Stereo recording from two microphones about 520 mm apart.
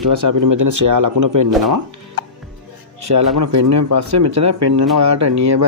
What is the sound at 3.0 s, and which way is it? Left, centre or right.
A man's voice, right.